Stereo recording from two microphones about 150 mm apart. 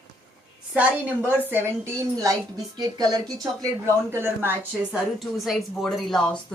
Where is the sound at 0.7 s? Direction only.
10° right (ahead or behind); by 3.3 s 25° right (ahead or behind).